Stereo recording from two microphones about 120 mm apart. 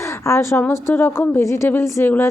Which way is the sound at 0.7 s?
20° left (ahead or behind).